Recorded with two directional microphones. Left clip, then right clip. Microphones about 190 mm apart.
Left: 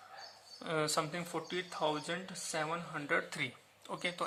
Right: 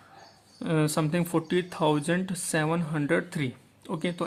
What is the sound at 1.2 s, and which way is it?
Speech, 35° right (ahead or behind).